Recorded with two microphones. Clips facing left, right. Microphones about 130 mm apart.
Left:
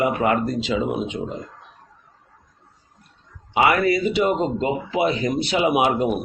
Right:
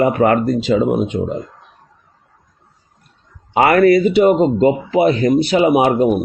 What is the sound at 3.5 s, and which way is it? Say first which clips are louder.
Speech: right 7 dB; 50° right (ahead or behind).